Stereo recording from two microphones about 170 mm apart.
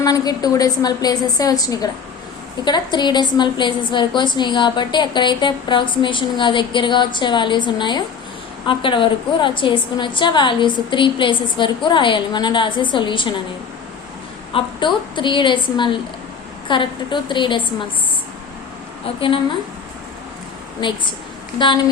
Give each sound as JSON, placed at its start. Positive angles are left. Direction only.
{"t": 0.0, "sound": "a woman's voice", "side_deg": 20}
{"t": 14.5, "sound": "a woman's voice", "side_deg": 30}
{"t": 19.0, "sound": "a woman's voice", "side_deg": 30}
{"t": 20.8, "sound": "a woman's voice", "side_deg": 30}